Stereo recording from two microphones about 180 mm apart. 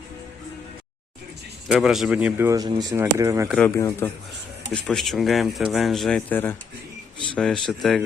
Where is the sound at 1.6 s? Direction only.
5° right (ahead or behind).